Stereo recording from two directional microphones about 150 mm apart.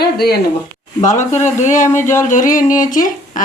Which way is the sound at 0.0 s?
90° left.